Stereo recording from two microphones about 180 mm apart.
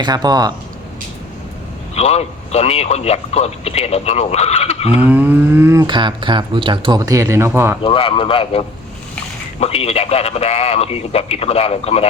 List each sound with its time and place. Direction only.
0.0 s speech: 20° right (ahead or behind)
2.0 s speech: 35° left (ahead or behind)
4.9 s speech: 10° right (ahead or behind)
7.9 s a man's voice: 30° left (ahead or behind)